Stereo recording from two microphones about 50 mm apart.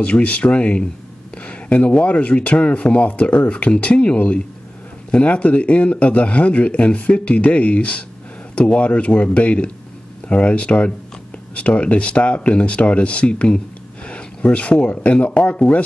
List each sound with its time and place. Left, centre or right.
0.0 s speech: left